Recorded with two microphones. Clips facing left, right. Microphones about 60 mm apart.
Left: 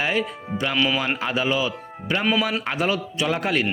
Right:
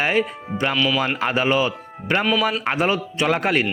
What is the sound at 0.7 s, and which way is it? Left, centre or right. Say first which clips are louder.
Speech: even; centre.